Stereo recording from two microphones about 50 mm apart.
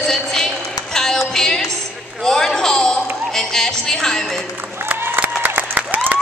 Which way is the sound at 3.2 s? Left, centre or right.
Centre.